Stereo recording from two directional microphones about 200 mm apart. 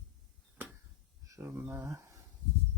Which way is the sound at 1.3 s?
15° right (ahead or behind).